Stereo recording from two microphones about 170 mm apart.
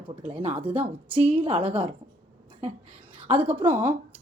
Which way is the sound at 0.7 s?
10° right (ahead or behind).